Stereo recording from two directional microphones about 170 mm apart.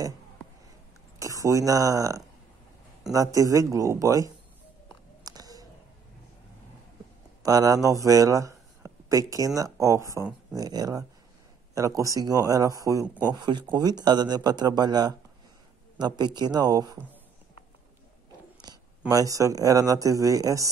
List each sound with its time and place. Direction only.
1.4 s speech: 20° right (ahead or behind)
5.2 s a sound: 20° right (ahead or behind)
7.4 s speech: 20° right (ahead or behind)
18.6 s speech: 20° right (ahead or behind)